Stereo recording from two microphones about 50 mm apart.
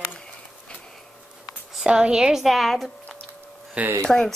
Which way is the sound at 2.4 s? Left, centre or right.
Centre.